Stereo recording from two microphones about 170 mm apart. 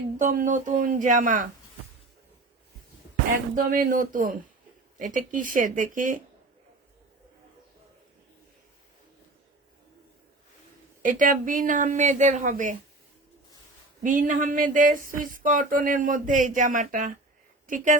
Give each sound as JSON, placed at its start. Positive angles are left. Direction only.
{"t": 0.2, "sound": "speech", "side_deg": -50}
{"t": 3.5, "sound": "speech", "side_deg": -55}
{"t": 11.0, "sound": "speech", "side_deg": -50}
{"t": 14.0, "sound": "speech", "side_deg": -50}